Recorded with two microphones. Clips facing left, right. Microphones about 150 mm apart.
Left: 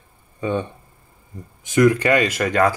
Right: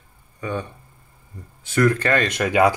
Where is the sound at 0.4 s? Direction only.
20° left (ahead or behind); by 2.5 s 5° left (ahead or behind).